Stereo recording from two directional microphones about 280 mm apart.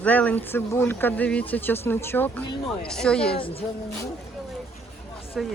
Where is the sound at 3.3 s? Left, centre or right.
Centre.